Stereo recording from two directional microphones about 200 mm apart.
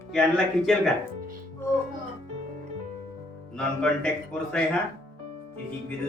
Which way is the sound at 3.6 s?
5° left (ahead or behind).